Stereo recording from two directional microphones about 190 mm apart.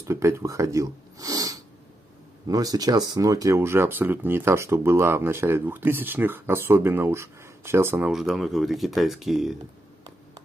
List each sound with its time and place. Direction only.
0.0 s speech: 15° right (ahead or behind)